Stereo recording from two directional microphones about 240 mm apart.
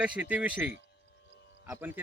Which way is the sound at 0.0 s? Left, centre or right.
Centre.